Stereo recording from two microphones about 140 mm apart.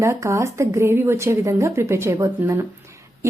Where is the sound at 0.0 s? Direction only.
20° right (ahead or behind).